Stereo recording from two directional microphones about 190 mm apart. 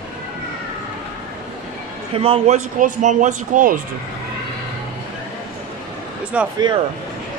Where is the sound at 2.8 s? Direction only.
40° right (ahead or behind).